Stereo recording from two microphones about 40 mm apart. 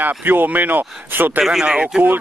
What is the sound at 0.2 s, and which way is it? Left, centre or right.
Speech, right.